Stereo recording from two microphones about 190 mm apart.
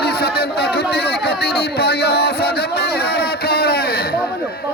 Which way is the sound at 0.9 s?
60° left (ahead or behind).